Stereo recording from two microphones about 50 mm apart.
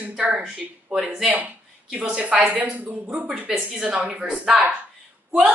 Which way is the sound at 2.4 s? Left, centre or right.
Right.